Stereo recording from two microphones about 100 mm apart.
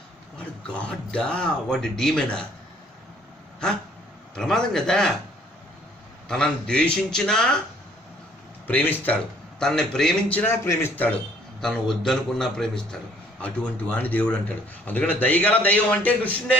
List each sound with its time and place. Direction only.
0.7 s a man's voice: 10° left (ahead or behind)
4.4 s a man's voice: 5° left (ahead or behind)
6.2 s a man's voice: 5° left (ahead or behind)
8.6 s a man's voice: 20° left (ahead or behind)
9.6 s a man's voice: 5° left (ahead or behind)
10.3 s speech: 20° left (ahead or behind)
11.6 s a man's voice: 5° left (ahead or behind)